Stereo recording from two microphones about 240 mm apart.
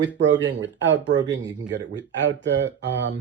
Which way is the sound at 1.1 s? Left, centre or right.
Centre.